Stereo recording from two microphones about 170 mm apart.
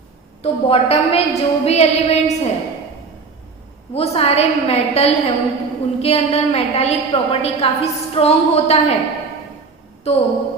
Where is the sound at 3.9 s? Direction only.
35° left (ahead or behind).